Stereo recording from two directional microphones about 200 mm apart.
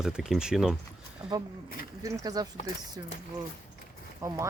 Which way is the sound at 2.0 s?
15° right (ahead or behind).